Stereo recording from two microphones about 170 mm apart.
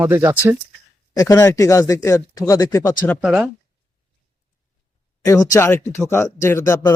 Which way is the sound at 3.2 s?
5° right (ahead or behind).